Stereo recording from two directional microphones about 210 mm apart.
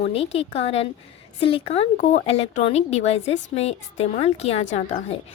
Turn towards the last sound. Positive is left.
turn(degrees=30)  # may be behind; listen again after turning